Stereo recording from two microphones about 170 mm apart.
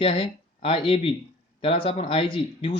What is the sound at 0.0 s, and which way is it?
Speech, 35° left (ahead or behind).